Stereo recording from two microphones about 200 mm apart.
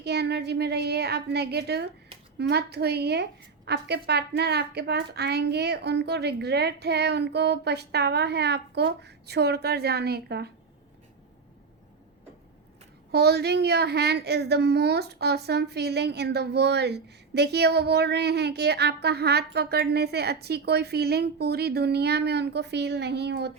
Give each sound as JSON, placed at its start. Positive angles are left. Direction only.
{"t": 0.0, "sound": "a woman's voice", "side_deg": -55}
{"t": 13.1, "sound": "a woman's voice", "side_deg": -55}